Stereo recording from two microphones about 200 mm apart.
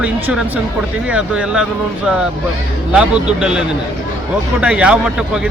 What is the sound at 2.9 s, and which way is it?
Speech, 5° right (ahead or behind).